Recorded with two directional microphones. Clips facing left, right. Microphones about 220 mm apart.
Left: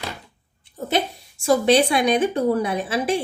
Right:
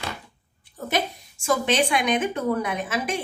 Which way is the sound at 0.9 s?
35° left (ahead or behind).